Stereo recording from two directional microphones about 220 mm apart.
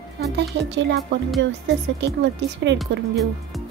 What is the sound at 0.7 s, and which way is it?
Speech, 50° right (ahead or behind).